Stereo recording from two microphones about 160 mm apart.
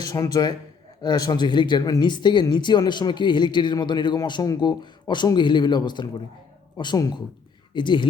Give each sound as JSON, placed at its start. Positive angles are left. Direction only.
{"t": 0.0, "sound": "speech", "side_deg": 20}